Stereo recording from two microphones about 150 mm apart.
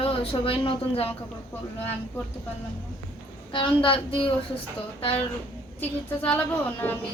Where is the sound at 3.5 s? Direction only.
35° left (ahead or behind).